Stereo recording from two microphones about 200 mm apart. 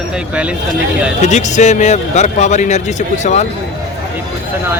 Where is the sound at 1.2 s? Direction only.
35° left (ahead or behind).